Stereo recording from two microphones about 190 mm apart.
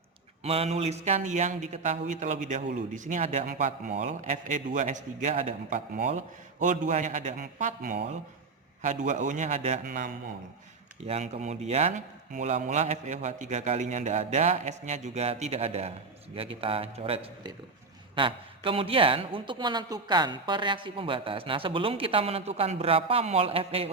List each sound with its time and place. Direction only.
0.4 s a man's voice: 30° right (ahead or behind)